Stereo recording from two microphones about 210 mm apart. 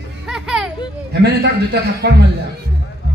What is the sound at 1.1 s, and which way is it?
A man's voice, 50° right (ahead or behind).